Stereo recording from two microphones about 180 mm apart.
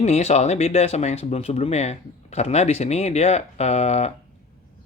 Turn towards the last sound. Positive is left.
turn(degrees=35)  # may be behind; listen again after turning